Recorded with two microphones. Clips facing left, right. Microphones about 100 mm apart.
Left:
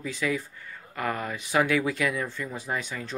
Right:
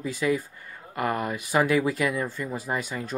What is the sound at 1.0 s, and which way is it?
Speech, 15° right (ahead or behind).